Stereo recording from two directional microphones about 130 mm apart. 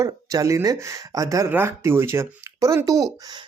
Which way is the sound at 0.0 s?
25° right (ahead or behind).